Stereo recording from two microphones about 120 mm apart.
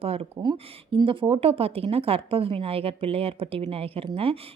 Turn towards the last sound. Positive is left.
turn(degrees=-55)  # may be behind; listen again after turning